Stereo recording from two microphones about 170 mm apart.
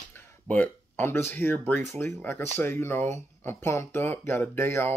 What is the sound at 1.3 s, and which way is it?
Speech, 10° left (ahead or behind).